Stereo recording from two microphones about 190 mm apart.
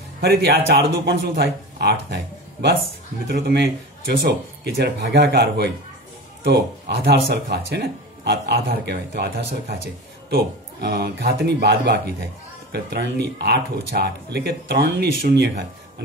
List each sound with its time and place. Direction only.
0.2 s speech: 55° right (ahead or behind)